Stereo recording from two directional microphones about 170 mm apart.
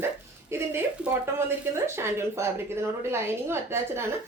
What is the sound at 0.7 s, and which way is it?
A woman's voice, 15° right (ahead or behind).